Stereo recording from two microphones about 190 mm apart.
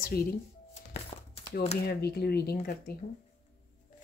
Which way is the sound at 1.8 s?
55° left (ahead or behind).